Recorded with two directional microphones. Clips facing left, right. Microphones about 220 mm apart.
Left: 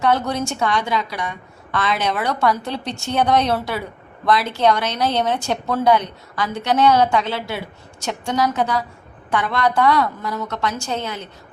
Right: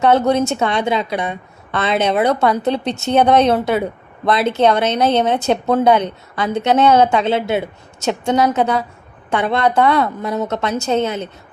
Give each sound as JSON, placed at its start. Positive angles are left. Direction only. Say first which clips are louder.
{"t": 0.0, "sound": "speech", "louder": "right 6 dB", "side_deg": -25}